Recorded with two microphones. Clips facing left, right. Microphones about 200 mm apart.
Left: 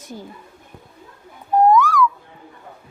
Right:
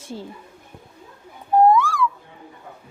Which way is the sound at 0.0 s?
30° right (ahead or behind).